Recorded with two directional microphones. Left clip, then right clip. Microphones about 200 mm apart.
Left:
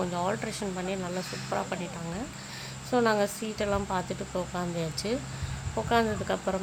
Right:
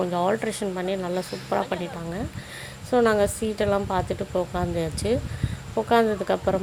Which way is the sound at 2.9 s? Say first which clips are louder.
Right 5 dB; 15° right (ahead or behind).